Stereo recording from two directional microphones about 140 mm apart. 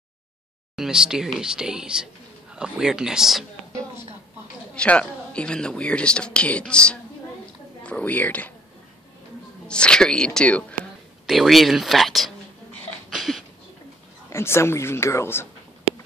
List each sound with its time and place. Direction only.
0.7 s speech: 5° right (ahead or behind)
4.7 s a woman's voice: 10° left (ahead or behind)
9.7 s a woman's voice: 5° left (ahead or behind)
13.1 s a sound: centre (ahead or behind)
14.3 s speech: 20° left (ahead or behind)